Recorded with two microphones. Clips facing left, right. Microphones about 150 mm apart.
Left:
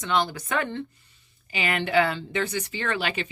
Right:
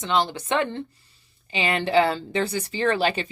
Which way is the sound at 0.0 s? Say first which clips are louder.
Right 2 dB; 25° right (ahead or behind).